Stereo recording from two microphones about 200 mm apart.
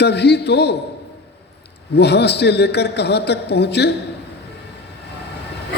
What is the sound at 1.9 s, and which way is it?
A man's voice, 55° left (ahead or behind).